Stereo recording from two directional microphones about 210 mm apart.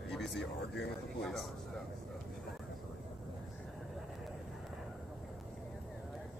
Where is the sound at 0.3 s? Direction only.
55° left (ahead or behind).